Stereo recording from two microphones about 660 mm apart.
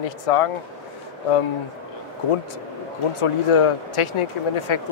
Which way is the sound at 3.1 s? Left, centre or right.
Left.